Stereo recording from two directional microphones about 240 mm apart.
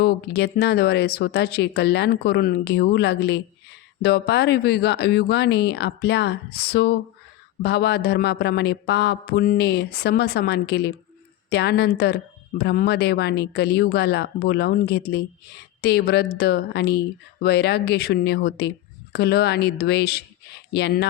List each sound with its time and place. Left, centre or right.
0.0 s speech: left